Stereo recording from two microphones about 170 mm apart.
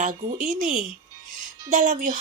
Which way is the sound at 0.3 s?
50° right (ahead or behind).